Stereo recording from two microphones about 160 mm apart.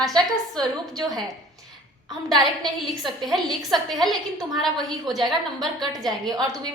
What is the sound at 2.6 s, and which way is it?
A woman's voice, centre (ahead or behind).